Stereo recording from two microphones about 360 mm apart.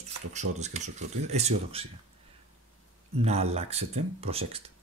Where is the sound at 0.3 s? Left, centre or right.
Centre.